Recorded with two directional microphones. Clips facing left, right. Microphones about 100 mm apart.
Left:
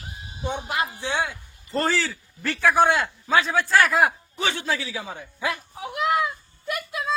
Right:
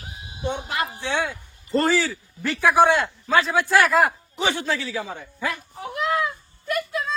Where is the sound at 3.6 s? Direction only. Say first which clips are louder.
Right 1 dB; 15° right (ahead or behind).